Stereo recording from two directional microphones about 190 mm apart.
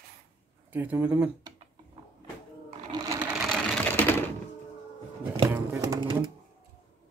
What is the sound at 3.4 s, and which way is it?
Sewing machine, 5° left (ahead or behind).